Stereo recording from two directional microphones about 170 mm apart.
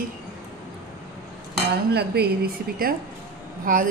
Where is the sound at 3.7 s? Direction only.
55° right (ahead or behind).